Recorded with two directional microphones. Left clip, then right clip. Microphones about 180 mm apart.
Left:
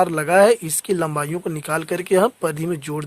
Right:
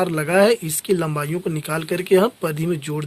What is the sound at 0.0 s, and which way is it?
Speech, 45° left (ahead or behind).